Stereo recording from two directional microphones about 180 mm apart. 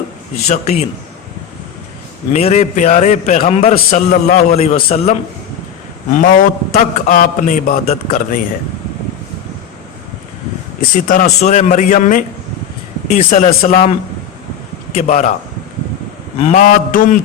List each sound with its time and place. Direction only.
0.4 s a man's voice: 40° left (ahead or behind)
2.3 s a man's voice: 35° left (ahead or behind)
6.1 s a man's voice: 50° left (ahead or behind)
10.8 s a man's voice: 50° left (ahead or behind)
16.4 s a man's voice: 45° left (ahead or behind)